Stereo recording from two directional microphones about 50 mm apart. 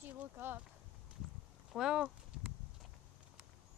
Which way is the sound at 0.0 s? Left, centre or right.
Right.